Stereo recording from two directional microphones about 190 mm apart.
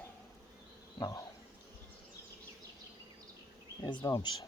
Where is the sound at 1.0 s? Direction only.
20° left (ahead or behind).